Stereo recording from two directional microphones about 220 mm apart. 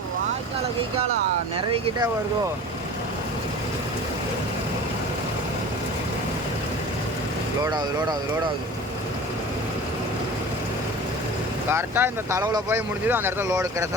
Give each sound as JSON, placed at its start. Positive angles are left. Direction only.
{"t": 7.6, "sound": "speech", "side_deg": -20}
{"t": 11.7, "sound": "speech", "side_deg": -10}